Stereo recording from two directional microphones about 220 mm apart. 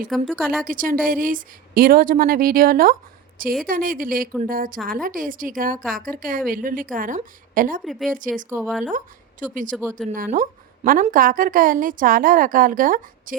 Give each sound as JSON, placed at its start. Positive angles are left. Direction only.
{"t": 0.1, "sound": "speech", "side_deg": 0}
{"t": 0.6, "sound": "a woman's voice", "side_deg": -40}
{"t": 7.9, "sound": "speech", "side_deg": 0}
{"t": 8.1, "sound": "a woman's voice", "side_deg": -35}
{"t": 8.4, "sound": "speech", "side_deg": -10}
{"t": 9.4, "sound": "a woman's voice", "side_deg": -35}
{"t": 10.0, "sound": "speech", "side_deg": 0}
{"t": 10.3, "sound": "a woman's voice", "side_deg": -40}